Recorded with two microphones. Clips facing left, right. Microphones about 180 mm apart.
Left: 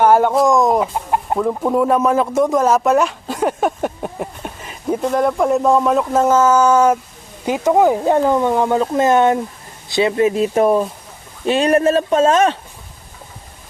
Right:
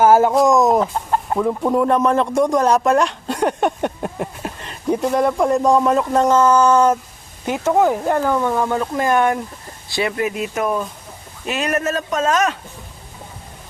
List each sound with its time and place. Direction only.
0.0 s speech: 5° right (ahead or behind)
0.9 s chicken: 15° left (ahead or behind)
1.4 s speech: centre (ahead or behind); by 12.5 s 30° left (ahead or behind)